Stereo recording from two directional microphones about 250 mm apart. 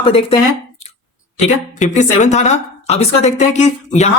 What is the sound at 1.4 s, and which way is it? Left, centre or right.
Speech, left.